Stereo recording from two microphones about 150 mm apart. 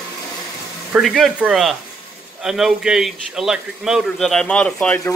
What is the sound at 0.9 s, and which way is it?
A man's voice, centre (ahead or behind).